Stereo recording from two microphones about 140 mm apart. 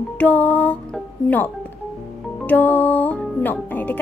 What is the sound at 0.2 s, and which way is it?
A woman's voice, 10° left (ahead or behind).